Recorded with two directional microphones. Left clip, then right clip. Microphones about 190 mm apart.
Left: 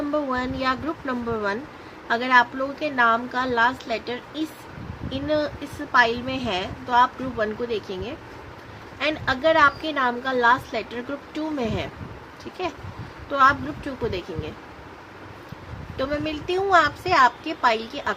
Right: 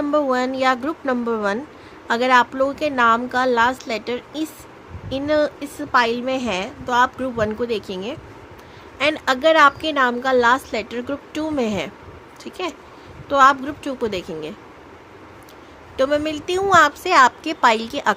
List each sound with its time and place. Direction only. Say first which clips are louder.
0.1 s a woman's voice: right 8 dB; 50° right (ahead or behind)
16.0 s a woman's voice: right 7 dB; 60° right (ahead or behind)